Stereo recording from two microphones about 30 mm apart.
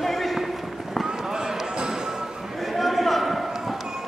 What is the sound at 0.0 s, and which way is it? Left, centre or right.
Run, centre.